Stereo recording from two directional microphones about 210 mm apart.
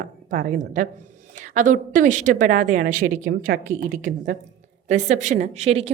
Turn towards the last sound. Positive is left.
turn(degrees=-30)  # may be behind; listen again after turning